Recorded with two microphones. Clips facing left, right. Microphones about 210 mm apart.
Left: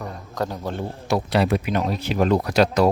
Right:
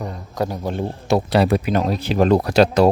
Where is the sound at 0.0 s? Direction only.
10° right (ahead or behind); by 2.9 s 30° right (ahead or behind).